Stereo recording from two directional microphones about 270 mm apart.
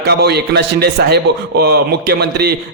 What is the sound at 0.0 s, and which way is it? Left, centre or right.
A man's voice, right.